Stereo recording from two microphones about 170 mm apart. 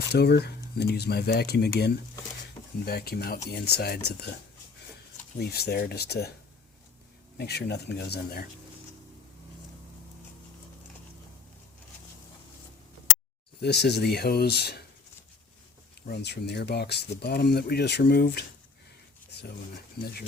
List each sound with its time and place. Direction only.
0.1 s speech: 70° left (ahead or behind)
5.4 s speech: 70° left (ahead or behind)
7.3 s speech: 70° left (ahead or behind)
13.6 s speech: 80° left
16.0 s speech: 80° left